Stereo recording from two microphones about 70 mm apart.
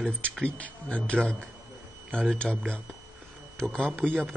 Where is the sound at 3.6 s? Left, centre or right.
Centre.